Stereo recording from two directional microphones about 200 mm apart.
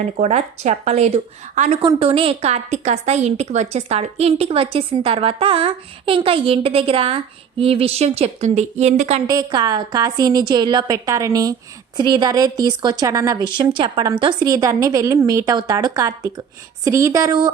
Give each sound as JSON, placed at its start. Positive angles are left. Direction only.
{"t": 0.2, "sound": "a woman's voice", "side_deg": -35}
{"t": 9.2, "sound": "a woman's voice", "side_deg": -20}